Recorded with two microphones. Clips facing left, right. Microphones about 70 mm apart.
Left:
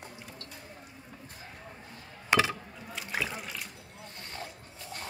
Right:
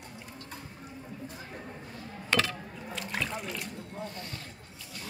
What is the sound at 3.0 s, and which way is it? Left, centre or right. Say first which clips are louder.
Water: even; centre.